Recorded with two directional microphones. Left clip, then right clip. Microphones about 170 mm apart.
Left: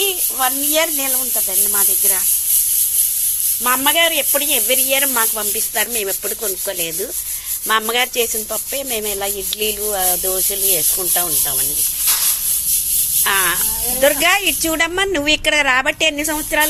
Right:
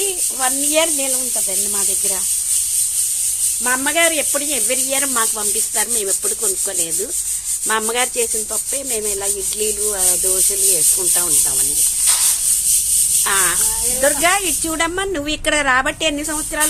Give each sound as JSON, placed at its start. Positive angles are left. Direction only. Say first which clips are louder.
{"t": 0.3, "sound": "speech", "louder": "even", "side_deg": -5}
{"t": 3.6, "sound": "speech", "louder": "left 2 dB", "side_deg": 0}
{"t": 13.2, "sound": "speech", "louder": "left 4 dB", "side_deg": 0}